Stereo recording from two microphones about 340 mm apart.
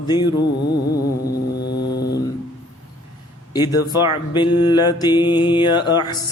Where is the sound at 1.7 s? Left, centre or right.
Left.